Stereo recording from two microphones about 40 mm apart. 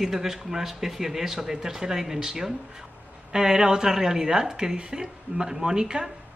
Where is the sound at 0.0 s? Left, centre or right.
Centre.